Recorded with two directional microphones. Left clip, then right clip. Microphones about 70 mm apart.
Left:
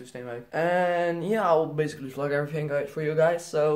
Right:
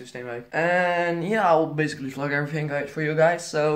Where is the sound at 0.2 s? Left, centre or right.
Left.